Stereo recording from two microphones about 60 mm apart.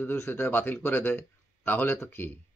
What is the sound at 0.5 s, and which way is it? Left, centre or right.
Speech, left.